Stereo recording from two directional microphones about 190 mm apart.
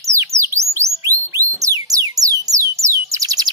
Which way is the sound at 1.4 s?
20° right (ahead or behind).